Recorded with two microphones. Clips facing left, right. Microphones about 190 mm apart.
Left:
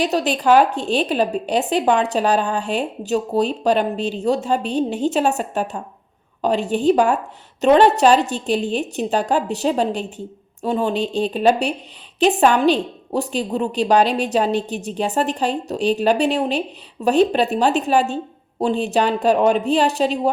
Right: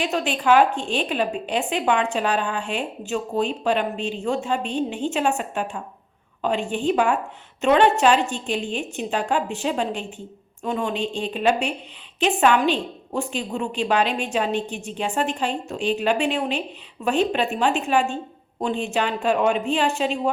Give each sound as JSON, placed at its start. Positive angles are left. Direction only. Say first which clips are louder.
{"t": 0.0, "sound": "a woman's voice", "louder": "left 5 dB", "side_deg": 40}